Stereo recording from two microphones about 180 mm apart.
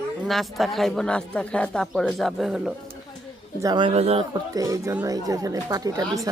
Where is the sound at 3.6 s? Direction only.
25° right (ahead or behind).